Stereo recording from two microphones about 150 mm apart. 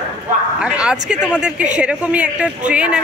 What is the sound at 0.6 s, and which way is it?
Speech, 5° right (ahead or behind).